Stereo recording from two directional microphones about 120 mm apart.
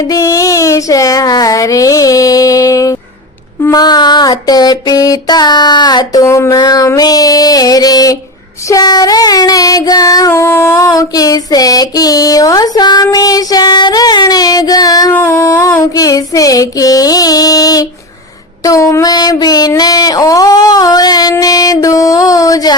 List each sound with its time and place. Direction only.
0.1 s child singing: 25° left (ahead or behind)
6.2 s child singing: 25° left (ahead or behind)
15.1 s a sound: 20° left (ahead or behind)